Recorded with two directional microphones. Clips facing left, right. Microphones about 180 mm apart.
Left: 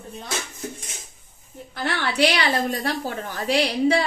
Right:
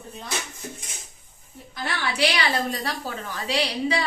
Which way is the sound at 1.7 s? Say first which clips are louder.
Left 4 dB; 55° left (ahead or behind).